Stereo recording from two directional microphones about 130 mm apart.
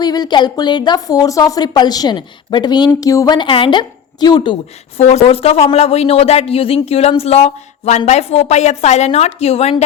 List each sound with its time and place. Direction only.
0.0 s a woman's voice: 30° left (ahead or behind)
4.9 s a woman's voice: 55° left (ahead or behind)